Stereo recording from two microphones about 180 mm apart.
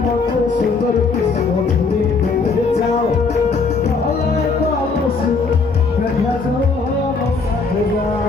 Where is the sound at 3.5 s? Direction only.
40° left (ahead or behind).